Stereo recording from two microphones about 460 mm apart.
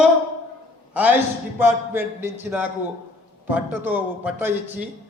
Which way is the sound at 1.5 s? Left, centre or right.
Centre.